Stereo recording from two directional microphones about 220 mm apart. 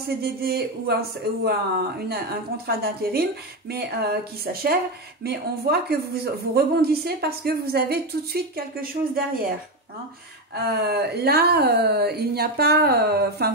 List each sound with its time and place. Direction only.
0.2 s speech: 45° right (ahead or behind)
2.0 s speech: 45° right (ahead or behind)
10.5 s speech: 45° right (ahead or behind)